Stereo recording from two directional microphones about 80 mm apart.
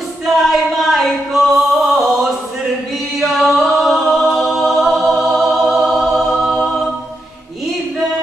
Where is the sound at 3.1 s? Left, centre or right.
Centre.